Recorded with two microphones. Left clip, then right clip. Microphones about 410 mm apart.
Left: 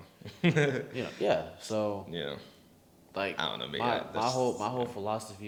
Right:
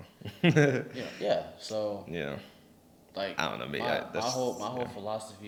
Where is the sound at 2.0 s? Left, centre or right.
Right.